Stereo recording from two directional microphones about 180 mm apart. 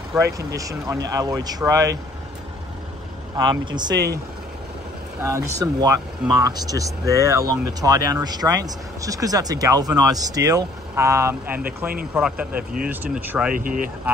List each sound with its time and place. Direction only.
0.1 s speech: 5° right (ahead or behind)
0.6 s speech: 20° right (ahead or behind)
3.3 s speech: 25° right (ahead or behind)
5.2 s speech: 15° right (ahead or behind)
13.6 s speech: 50° right (ahead or behind)